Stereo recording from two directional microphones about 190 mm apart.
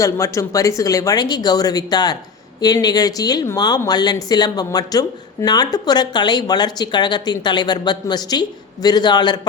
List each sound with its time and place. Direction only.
0.0 s speech: 15° left (ahead or behind)